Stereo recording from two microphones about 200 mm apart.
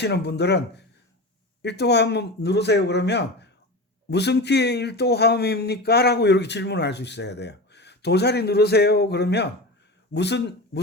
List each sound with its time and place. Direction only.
0.0 s speech: 55° left (ahead or behind)